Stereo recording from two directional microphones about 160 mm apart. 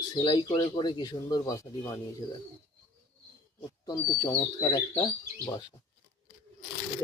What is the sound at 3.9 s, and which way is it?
Speech, 25° left (ahead or behind).